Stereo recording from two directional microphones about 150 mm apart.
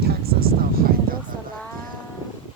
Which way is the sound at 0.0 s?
90° right.